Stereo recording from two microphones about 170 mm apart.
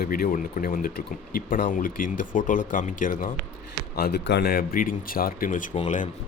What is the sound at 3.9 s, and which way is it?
Speech, 70° left (ahead or behind).